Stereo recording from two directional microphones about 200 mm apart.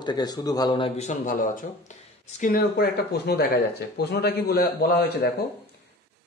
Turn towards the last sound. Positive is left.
turn(degrees=55)  # may be behind; listen again after turning